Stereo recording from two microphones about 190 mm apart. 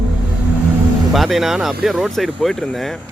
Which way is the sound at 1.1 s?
Centre (ahead or behind).